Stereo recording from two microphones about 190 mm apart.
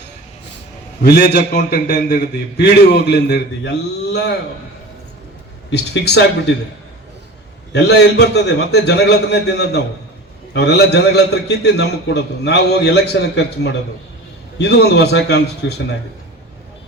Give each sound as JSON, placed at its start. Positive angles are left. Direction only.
{"t": 1.0, "sound": "a man's voice", "side_deg": 60}
{"t": 5.7, "sound": "a man's voice", "side_deg": 60}
{"t": 7.7, "sound": "a man's voice", "side_deg": 65}